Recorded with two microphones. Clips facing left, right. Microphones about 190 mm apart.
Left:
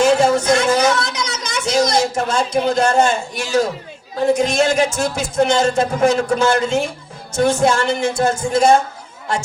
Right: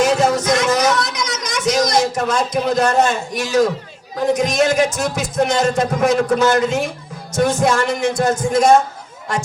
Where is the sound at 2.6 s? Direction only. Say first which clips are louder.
Even; 30° left (ahead or behind).